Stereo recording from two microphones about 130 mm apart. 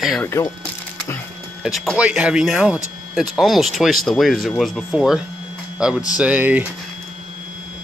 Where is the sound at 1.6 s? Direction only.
Centre (ahead or behind).